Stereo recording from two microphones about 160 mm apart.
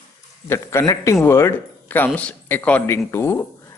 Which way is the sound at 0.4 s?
15° left (ahead or behind).